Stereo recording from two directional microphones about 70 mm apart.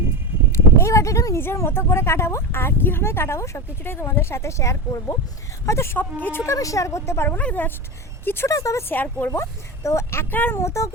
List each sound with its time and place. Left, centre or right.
0.5 s a sound: left
1.4 s speech: left
6.1 s speech: left
6.4 s speech: left
7.3 s speech: left
8.4 s speech: left
8.9 s speech: left
9.3 s speech: left
10.6 s speech: left